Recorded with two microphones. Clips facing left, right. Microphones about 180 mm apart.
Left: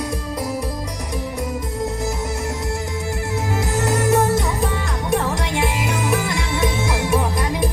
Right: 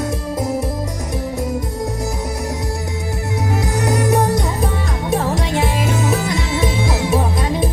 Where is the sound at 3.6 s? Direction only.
20° right (ahead or behind).